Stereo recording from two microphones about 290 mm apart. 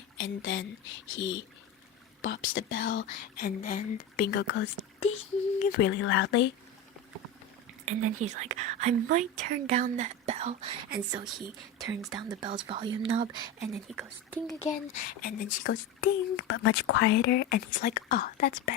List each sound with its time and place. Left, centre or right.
0.2 s speech: left
2.2 s speech: left
4.9 s speech: left
6.0 s speech: left
7.9 s speech: right
11.8 s speech: centre
13.8 s speech: centre
14.6 s speech: left
15.7 s speech: left